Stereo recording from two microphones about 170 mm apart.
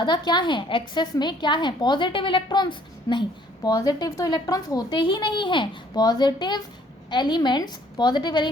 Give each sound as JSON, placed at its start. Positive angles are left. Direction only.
{"t": 0.0, "sound": "a woman's voice", "side_deg": 25}